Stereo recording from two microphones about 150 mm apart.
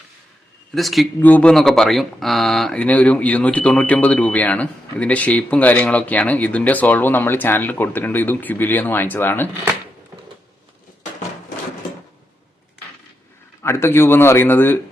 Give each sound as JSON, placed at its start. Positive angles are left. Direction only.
{"t": 0.7, "sound": "speech", "side_deg": 0}
{"t": 13.6, "sound": "speech", "side_deg": 15}